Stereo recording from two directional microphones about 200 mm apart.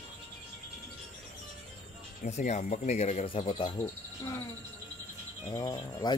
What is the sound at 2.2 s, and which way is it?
Speech, 35° left (ahead or behind).